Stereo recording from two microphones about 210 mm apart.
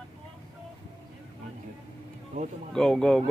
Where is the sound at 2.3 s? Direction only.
35° right (ahead or behind).